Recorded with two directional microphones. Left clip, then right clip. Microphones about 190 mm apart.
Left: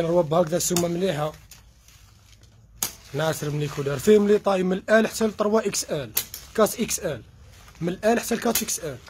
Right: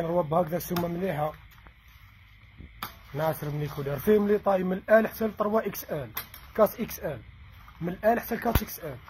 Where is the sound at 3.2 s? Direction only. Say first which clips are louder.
Left 4 dB; 20° left (ahead or behind).